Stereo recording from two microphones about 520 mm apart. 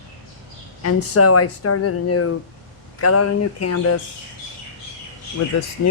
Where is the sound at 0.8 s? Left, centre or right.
Left.